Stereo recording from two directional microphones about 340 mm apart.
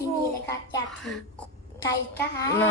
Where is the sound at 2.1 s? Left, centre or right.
Centre.